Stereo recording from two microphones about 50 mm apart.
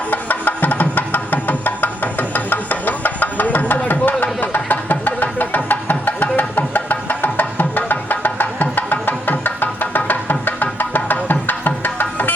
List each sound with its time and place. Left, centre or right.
0.1 s music: left